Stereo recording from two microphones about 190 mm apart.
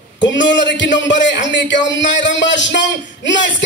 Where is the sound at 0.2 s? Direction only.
70° left (ahead or behind).